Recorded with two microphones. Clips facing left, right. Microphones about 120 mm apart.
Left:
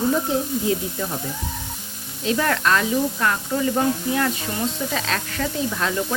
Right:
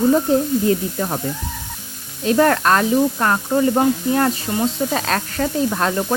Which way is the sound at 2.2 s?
45° right (ahead or behind).